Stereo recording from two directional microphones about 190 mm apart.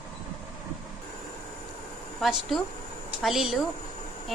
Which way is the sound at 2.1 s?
Centre (ahead or behind).